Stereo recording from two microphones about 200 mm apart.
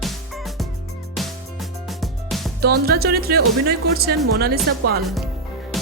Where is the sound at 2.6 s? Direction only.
50° right (ahead or behind).